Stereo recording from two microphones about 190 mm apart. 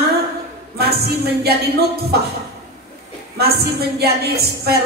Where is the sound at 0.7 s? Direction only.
55° right (ahead or behind).